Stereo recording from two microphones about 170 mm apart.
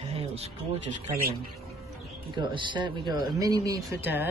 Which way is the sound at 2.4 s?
30° right (ahead or behind).